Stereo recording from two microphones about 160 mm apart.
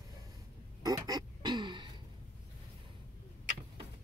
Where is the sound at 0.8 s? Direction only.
25° right (ahead or behind).